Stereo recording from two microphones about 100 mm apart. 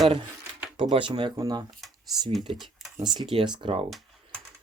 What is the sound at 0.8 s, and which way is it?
Speech, 60° right (ahead or behind).